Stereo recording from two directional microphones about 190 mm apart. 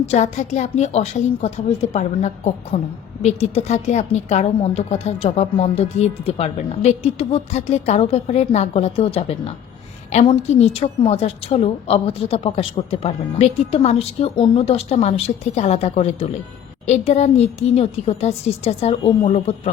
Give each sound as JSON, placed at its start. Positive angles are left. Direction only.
{"t": 0.0, "sound": "a woman's voice", "side_deg": 35}
{"t": 10.1, "sound": "a woman's voice", "side_deg": 35}